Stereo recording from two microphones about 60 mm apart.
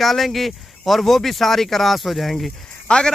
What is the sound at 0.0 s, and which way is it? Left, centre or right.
Speech, centre.